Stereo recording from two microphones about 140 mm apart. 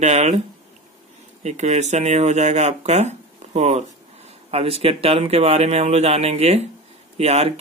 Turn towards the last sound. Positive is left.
turn(degrees=-50)  # may be behind; listen again after turning